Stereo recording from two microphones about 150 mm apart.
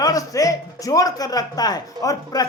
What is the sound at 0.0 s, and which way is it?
Speech, 25° left (ahead or behind).